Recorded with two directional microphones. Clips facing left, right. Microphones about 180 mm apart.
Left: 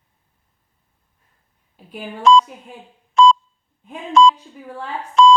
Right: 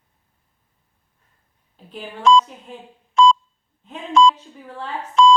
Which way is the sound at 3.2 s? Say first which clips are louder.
Left 2 dB; 60° left (ahead or behind).